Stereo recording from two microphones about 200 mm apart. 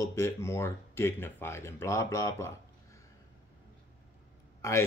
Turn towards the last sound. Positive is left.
turn(degrees=15)  # may be behind; listen again after turning